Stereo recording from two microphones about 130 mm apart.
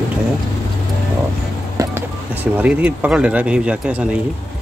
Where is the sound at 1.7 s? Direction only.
25° right (ahead or behind).